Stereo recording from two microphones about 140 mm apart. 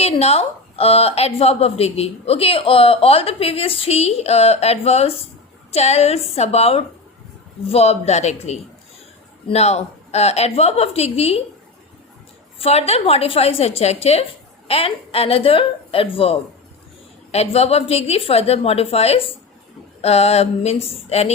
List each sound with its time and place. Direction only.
0.0 s a woman's voice: 45° left (ahead or behind)
12.5 s a woman's voice: 45° left (ahead or behind)